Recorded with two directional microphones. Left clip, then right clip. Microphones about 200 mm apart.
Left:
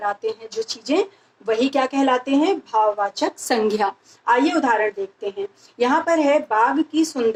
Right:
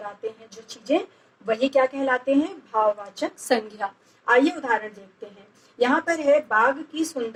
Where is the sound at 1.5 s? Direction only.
15° left (ahead or behind).